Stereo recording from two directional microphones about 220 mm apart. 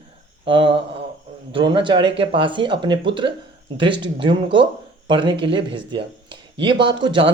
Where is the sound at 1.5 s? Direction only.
20° right (ahead or behind).